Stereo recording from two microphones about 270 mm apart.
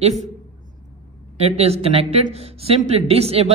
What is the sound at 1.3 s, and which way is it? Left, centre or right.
A man's voice, right.